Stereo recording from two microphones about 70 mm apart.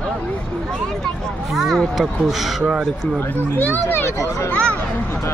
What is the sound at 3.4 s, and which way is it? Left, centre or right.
Speech, left.